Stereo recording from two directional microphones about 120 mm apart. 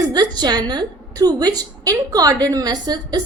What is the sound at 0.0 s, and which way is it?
A woman's voice, 35° right (ahead or behind).